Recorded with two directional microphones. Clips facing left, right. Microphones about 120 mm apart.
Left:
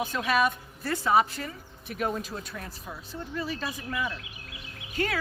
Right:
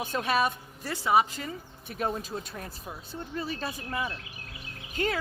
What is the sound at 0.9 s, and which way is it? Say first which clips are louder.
A woman's voice: left 1 dB; 15° right (ahead or behind).